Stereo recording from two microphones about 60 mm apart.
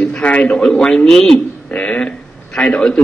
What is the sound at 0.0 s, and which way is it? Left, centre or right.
A man's voice, centre.